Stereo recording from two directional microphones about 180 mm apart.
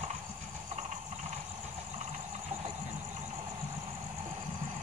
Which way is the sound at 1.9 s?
40° right (ahead or behind).